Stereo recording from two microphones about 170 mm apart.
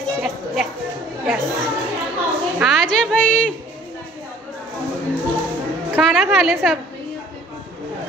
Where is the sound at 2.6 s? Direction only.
Centre (ahead or behind).